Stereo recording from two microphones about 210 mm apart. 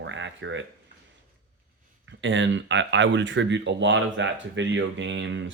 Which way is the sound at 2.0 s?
60° right (ahead or behind).